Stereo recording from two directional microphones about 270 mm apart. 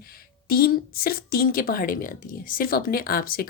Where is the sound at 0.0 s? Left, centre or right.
Left.